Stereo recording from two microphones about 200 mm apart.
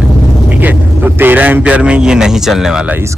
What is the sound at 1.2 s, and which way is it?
A man's voice, 10° right (ahead or behind).